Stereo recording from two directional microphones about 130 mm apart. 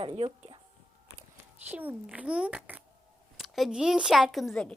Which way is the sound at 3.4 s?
Centre (ahead or behind).